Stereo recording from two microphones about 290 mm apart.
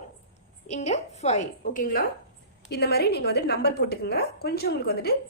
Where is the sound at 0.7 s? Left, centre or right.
Left.